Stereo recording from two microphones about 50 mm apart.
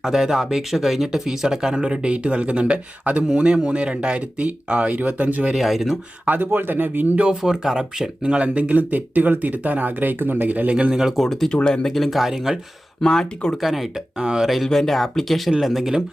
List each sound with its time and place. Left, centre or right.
0.0 s speech: centre; by 3.2 s right
3.3 s speech: centre
5.5 s speech: centre
6.2 s speech: right
7.4 s speech: centre; by 10.7 s right
10.7 s speech: right
11.2 s speech: centre
11.9 s speech: centre
13.0 s speech: centre
13.6 s speech: centre
14.5 s speech: centre